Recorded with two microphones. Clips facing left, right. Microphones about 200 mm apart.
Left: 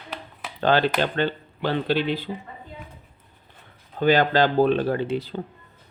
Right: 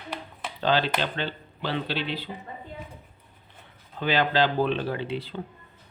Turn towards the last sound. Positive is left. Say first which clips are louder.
# left 6 dB
turn(degrees=40)  # may be behind; listen again after turning